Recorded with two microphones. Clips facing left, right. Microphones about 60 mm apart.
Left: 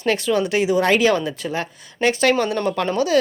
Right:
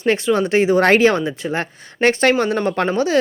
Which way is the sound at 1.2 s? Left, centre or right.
Right.